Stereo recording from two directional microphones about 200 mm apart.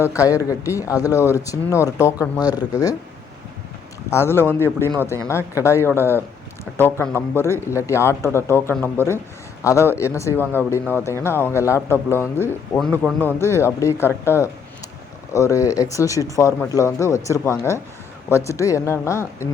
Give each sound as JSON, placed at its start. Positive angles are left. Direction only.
{"t": 0.0, "sound": "speech", "side_deg": 15}
{"t": 4.1, "sound": "speech", "side_deg": 10}